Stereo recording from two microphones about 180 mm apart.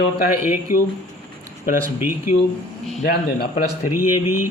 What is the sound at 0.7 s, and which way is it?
Speech, 50° left (ahead or behind).